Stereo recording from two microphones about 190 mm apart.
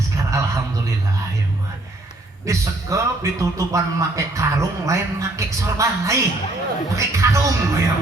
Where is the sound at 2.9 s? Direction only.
15° right (ahead or behind).